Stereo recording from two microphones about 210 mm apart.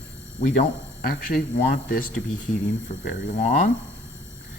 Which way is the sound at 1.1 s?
40° left (ahead or behind).